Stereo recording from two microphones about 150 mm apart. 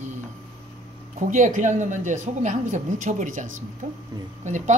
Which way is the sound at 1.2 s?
60° right (ahead or behind).